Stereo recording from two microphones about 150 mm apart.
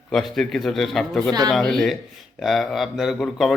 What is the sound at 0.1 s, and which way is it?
A man's voice, centre (ahead or behind).